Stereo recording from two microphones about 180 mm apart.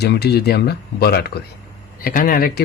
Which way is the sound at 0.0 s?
65° left (ahead or behind).